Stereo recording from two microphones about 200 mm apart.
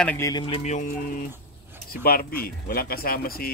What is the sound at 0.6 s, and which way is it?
Speech, 35° left (ahead or behind).